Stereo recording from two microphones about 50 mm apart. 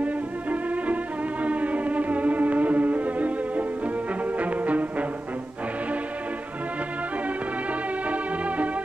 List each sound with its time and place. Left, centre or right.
0.0 s music: right
8.1 s music: right